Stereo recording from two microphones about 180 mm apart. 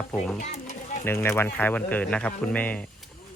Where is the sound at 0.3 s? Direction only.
40° left (ahead or behind).